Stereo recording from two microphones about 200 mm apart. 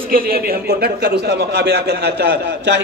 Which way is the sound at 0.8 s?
55° right (ahead or behind).